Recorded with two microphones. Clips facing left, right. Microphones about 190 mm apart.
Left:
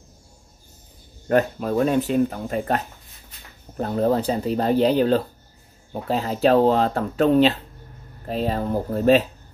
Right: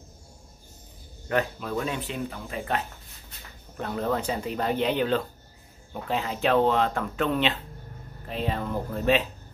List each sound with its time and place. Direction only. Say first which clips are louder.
1.3 s speech: left 7 dB; 40° left (ahead or behind)